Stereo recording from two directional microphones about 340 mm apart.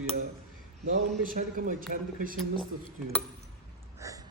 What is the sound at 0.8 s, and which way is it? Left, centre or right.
A man's voice, right.